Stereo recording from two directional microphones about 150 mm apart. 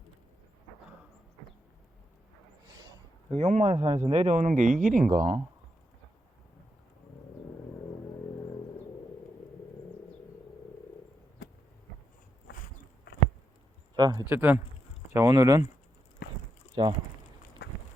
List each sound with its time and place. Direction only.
3.2 s speech: 45° right (ahead or behind)
12.5 s a sound: 90° left
13.9 s speech: 25° right (ahead or behind)
14.3 s speech: 10° right (ahead or behind)
15.1 s speech: 25° right (ahead or behind)
17.6 s walk: 90° left